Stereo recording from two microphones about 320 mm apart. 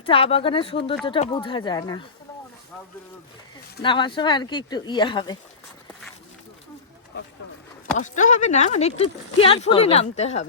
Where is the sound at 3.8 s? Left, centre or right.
Centre.